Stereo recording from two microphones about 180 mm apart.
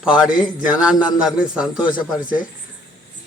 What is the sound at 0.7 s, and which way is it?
Speech, 5° right (ahead or behind).